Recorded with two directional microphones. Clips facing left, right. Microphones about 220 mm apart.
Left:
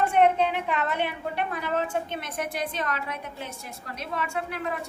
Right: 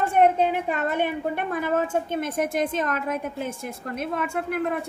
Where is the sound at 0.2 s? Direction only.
45° right (ahead or behind).